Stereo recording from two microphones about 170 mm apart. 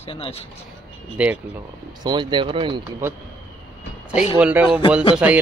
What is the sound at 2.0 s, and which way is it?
Speech, 25° right (ahead or behind).